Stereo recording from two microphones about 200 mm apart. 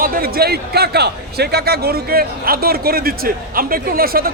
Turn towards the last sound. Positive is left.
turn(degrees=-45)  # may be behind; listen again after turning